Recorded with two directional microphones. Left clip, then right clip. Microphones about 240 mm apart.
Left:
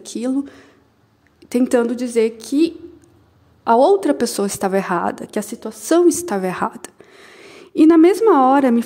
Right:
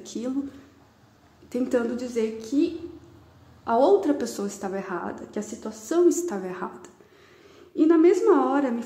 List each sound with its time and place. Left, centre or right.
0.0 s a woman's voice: left